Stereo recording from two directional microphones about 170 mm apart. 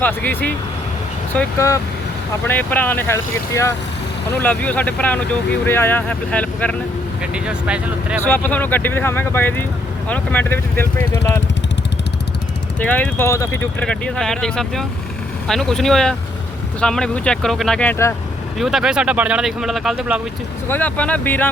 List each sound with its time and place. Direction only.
0.0 s speech: 10° left (ahead or behind)
7.2 s speech: 5° right (ahead or behind)
8.2 s speech: 10° left (ahead or behind)
12.8 s speech: 10° left (ahead or behind)
18.6 s speech: centre (ahead or behind)
20.7 s speech: 10° left (ahead or behind)